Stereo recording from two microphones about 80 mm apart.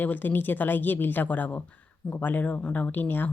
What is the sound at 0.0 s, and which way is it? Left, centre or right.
Speech, left.